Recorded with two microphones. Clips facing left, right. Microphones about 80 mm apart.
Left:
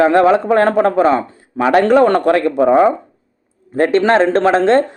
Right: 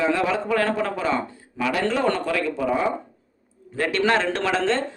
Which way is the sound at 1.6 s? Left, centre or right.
Left.